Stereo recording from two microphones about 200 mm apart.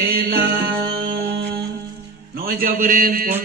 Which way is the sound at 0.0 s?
50° right (ahead or behind).